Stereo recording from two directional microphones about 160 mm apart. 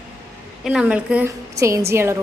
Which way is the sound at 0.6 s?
5° right (ahead or behind).